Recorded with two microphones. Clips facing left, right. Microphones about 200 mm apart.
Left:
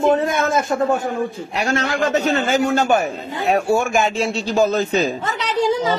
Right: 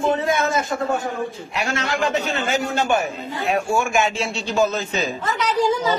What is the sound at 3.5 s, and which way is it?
Speech, 40° left (ahead or behind).